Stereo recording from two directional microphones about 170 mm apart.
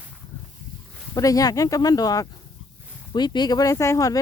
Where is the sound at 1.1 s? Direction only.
20° left (ahead or behind).